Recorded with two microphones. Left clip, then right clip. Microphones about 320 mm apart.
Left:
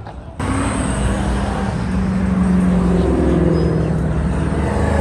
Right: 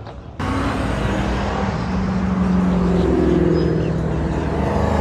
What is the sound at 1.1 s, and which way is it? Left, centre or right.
Vehicle, left.